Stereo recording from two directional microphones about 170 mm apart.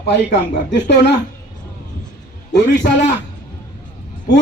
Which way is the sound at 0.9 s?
80° left.